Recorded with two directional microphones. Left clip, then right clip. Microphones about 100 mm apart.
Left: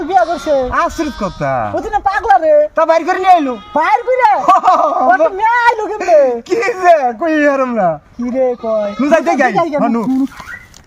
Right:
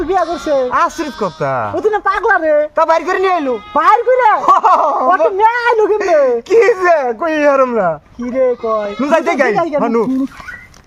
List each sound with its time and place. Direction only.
0.2 s speech: centre (ahead or behind)
1.7 s a woman's voice: 30° right (ahead or behind)
2.8 s speech: 25° right (ahead or behind)